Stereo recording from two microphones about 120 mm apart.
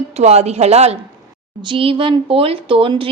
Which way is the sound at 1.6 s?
45° right (ahead or behind).